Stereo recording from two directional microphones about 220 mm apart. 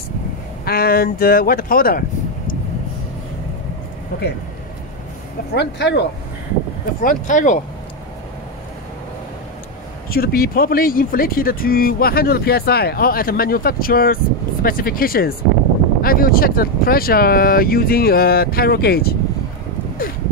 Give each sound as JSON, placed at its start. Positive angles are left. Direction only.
{"t": 0.7, "sound": "speech", "side_deg": 45}
{"t": 5.5, "sound": "speech", "side_deg": 50}
{"t": 7.0, "sound": "speech", "side_deg": 35}
{"t": 10.0, "sound": "speech", "side_deg": 40}